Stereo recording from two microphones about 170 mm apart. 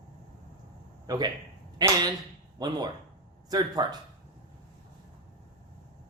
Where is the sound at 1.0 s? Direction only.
20° right (ahead or behind).